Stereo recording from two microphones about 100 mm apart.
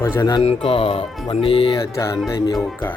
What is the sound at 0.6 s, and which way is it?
Speech, 65° left (ahead or behind).